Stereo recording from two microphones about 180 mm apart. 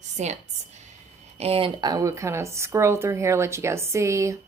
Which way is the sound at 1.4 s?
35° right (ahead or behind).